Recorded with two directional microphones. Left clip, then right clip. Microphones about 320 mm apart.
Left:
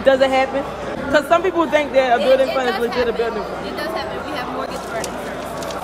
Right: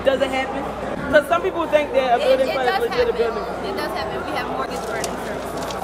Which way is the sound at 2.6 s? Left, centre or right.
Centre.